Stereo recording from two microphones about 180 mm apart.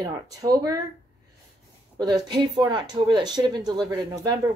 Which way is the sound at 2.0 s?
20° right (ahead or behind).